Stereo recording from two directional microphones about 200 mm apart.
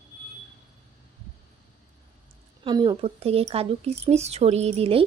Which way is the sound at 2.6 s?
20° right (ahead or behind).